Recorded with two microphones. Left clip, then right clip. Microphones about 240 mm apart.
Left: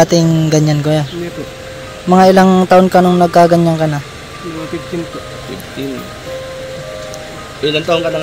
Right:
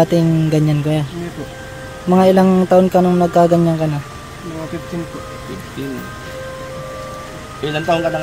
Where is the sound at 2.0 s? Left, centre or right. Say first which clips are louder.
Left 4 dB; centre.